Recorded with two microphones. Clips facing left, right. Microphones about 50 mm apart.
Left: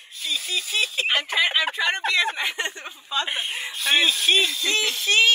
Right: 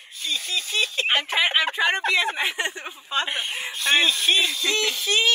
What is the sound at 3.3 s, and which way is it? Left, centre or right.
Speech, centre.